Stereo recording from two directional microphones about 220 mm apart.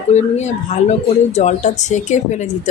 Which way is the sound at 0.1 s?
30° left (ahead or behind).